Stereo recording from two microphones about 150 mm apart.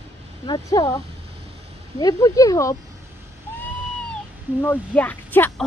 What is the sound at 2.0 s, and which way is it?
Speech, 25° left (ahead or behind).